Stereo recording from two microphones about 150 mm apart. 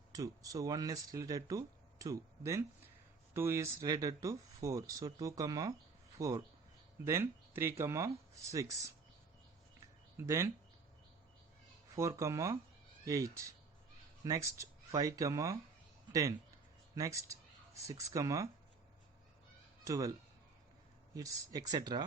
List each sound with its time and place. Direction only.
0.1 s speech: 25° right (ahead or behind)
10.2 s speech: 20° right (ahead or behind)
11.9 s speech: 20° right (ahead or behind)
16.9 s speech: 20° right (ahead or behind)
19.8 s speech: 20° right (ahead or behind)
21.2 s speech: 25° right (ahead or behind)